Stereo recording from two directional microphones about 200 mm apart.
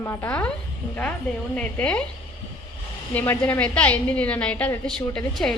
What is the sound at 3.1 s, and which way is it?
A woman's voice, 10° left (ahead or behind).